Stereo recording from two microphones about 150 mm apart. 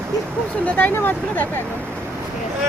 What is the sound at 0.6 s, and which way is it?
Speech, 15° left (ahead or behind).